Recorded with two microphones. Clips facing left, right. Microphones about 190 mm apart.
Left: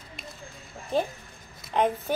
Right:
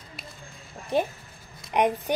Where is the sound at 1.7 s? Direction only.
15° right (ahead or behind).